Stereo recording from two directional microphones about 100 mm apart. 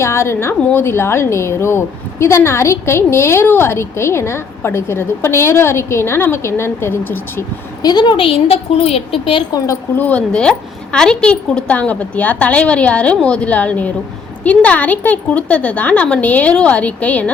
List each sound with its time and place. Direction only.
0.0 s speech: 25° left (ahead or behind)
7.8 s a woman's voice: 45° left (ahead or behind); by 9.4 s 70° left (ahead or behind)
10.0 s a woman's voice: 10° left (ahead or behind)